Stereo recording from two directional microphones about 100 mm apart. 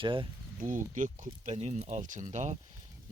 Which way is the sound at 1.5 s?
90° right.